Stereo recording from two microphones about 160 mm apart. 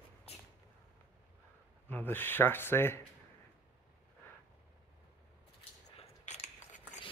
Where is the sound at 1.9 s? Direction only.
10° left (ahead or behind).